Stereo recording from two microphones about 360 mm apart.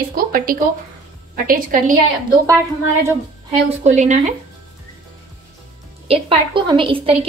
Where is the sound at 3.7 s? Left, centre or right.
Centre.